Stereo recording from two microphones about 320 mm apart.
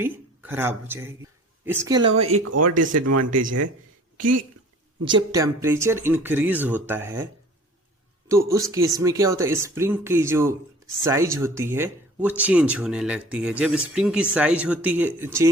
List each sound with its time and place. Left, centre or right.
0.0 s speech: centre
2.3 s speech: right
5.0 s speech: centre
8.3 s speech: centre